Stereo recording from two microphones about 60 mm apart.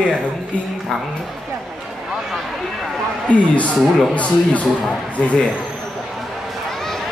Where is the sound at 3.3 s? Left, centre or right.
Left.